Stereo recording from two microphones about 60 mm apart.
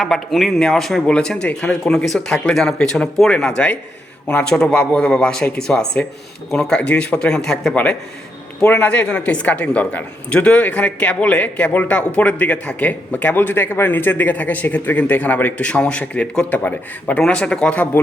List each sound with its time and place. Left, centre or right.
0.0 s speech: centre
8.6 s a woman's voice: centre